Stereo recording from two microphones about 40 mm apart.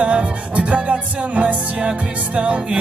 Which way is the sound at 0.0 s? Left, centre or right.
Right.